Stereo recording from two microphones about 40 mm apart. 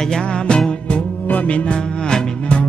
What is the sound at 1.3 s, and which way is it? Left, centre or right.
Music, left.